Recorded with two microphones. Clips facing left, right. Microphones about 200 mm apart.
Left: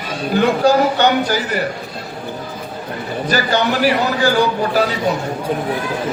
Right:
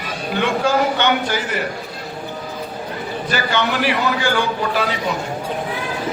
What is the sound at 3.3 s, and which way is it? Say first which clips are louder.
Speech: left 4 dB; 40° left (ahead or behind).